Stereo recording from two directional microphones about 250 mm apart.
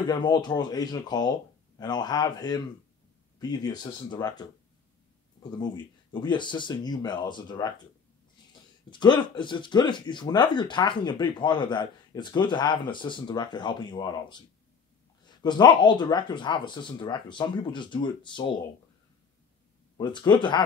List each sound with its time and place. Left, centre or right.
0.0 s speech: centre
6.1 s speech: centre
8.9 s speech: centre
20.0 s speech: centre